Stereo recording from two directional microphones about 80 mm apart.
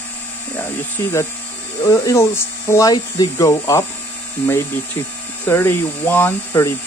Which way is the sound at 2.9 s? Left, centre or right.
Left.